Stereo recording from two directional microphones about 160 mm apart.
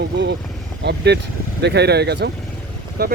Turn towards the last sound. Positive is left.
turn(degrees=-80)